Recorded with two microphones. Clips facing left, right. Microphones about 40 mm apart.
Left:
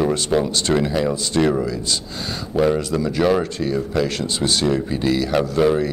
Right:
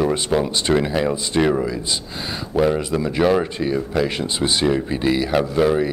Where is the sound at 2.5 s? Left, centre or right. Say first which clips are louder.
Even; centre.